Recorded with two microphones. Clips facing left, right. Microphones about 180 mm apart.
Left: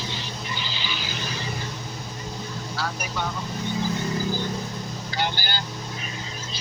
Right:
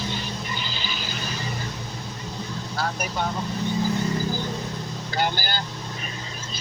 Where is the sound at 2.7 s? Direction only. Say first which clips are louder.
Right 3 dB; 45° right (ahead or behind).